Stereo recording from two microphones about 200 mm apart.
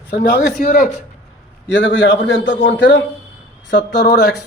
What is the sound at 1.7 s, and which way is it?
Speech, 65° left (ahead or behind).